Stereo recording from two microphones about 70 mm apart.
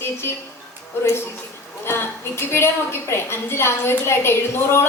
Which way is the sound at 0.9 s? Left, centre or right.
Left.